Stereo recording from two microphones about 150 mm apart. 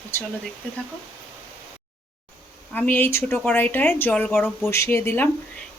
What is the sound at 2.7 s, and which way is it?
Speech, 15° left (ahead or behind).